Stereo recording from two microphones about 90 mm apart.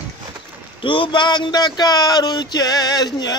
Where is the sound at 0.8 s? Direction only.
70° left (ahead or behind).